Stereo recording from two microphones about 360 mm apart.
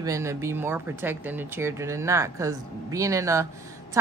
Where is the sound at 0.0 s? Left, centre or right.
Centre.